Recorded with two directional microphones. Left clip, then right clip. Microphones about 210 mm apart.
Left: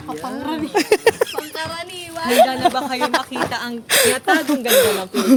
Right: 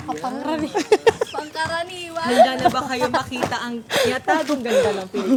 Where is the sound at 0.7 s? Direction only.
40° left (ahead or behind).